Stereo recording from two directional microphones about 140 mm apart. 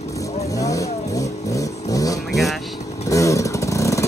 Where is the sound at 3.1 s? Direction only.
25° left (ahead or behind).